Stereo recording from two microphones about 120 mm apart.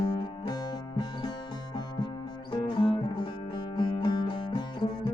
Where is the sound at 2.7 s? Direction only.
40° left (ahead or behind).